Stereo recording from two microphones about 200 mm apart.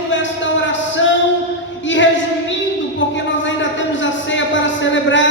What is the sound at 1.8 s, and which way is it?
Speech, 65° left (ahead or behind).